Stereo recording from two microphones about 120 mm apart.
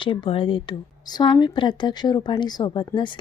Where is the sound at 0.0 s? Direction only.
45° left (ahead or behind).